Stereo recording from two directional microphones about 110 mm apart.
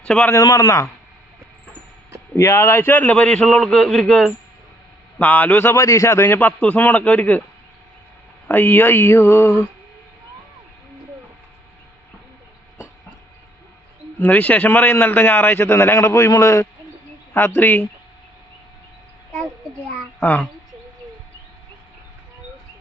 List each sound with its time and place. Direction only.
0.0 s a man's voice: 10° left (ahead or behind)
0.4 s a man's voice: 30° left (ahead or behind)
2.3 s a man's voice: 25° left (ahead or behind); by 4.4 s 5° left (ahead or behind)
5.1 s a man's voice: 15° left (ahead or behind)
8.4 s a man's voice: 20° left (ahead or behind)
14.2 s a man's voice: 15° left (ahead or behind)
20.1 s a child's voice: 15° left (ahead or behind)